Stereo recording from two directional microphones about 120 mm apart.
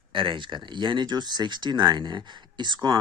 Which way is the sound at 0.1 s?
45° right (ahead or behind).